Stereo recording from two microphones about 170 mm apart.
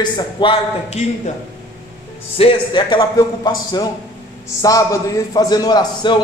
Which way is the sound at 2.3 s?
30° left (ahead or behind).